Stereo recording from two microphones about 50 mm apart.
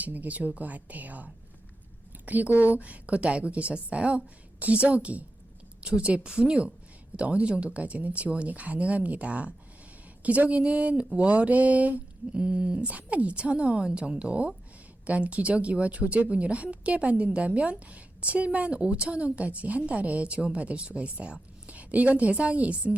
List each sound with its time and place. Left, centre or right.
0.0 s a woman's voice: right